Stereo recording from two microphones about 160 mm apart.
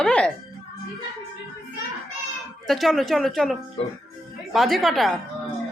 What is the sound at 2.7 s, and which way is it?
Speech, centre (ahead or behind).